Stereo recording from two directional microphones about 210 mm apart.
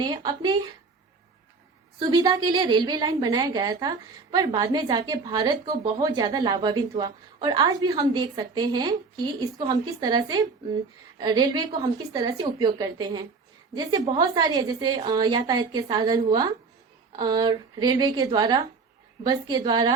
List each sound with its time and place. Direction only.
0.0 s speech: 20° right (ahead or behind)
2.0 s speech: 20° right (ahead or behind)